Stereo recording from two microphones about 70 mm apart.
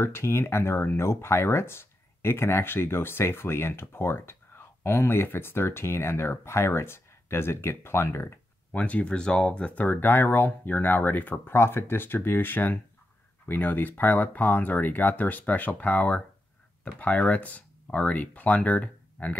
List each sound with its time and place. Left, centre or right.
0.0 s speech: left
8.7 s speech: centre